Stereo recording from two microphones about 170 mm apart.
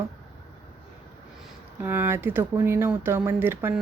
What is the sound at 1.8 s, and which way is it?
Speech, 10° right (ahead or behind).